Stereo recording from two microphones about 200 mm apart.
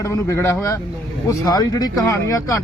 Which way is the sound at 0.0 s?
15° left (ahead or behind).